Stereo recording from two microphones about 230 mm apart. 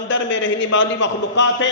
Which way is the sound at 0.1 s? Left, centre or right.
Left.